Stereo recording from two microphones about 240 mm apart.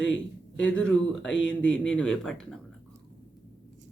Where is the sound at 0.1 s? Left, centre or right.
Left.